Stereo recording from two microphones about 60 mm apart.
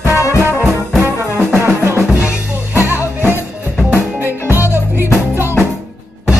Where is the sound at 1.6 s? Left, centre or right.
Right.